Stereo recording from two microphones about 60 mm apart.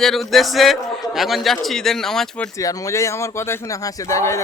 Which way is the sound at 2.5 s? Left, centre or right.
Left.